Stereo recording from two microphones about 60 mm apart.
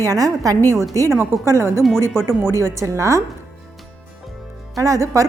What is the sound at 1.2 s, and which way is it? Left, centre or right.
A woman's voice, right.